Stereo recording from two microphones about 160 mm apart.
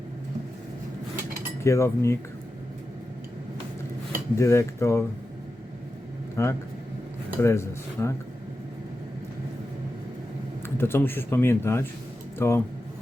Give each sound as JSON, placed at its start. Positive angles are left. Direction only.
{"t": 1.6, "sound": "speech", "side_deg": 15}
{"t": 4.4, "sound": "speech", "side_deg": 15}
{"t": 6.4, "sound": "speech", "side_deg": 15}
{"t": 10.8, "sound": "speech", "side_deg": 15}